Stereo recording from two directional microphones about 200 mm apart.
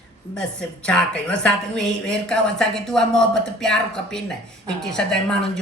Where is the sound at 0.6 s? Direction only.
5° left (ahead or behind).